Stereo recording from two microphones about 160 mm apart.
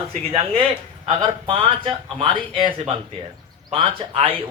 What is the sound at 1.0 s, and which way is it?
Speech, 35° right (ahead or behind).